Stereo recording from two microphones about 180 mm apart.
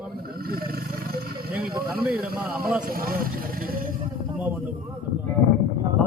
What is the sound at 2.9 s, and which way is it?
Speech, 55° right (ahead or behind).